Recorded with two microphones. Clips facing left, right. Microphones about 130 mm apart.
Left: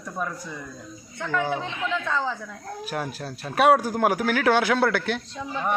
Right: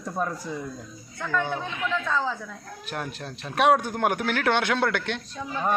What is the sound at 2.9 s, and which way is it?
Speech, 5° left (ahead or behind).